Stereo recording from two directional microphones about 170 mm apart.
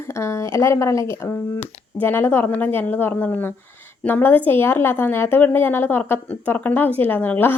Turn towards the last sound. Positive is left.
turn(degrees=10)  # may be behind; listen again after turning